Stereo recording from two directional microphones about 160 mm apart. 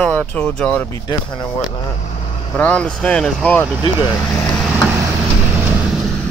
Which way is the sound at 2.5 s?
10° left (ahead or behind).